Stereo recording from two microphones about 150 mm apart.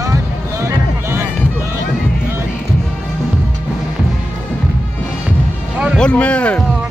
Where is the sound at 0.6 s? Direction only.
15° right (ahead or behind).